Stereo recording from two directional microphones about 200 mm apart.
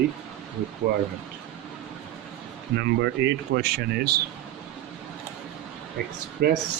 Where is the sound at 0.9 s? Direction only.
50° right (ahead or behind).